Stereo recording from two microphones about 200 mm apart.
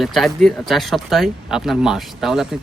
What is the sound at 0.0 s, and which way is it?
Speech, centre (ahead or behind).